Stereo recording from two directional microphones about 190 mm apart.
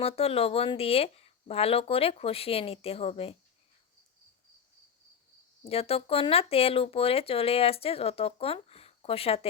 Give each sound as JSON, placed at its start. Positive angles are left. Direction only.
{"t": 0.0, "sound": "speech", "side_deg": 30}
{"t": 5.6, "sound": "speech", "side_deg": 30}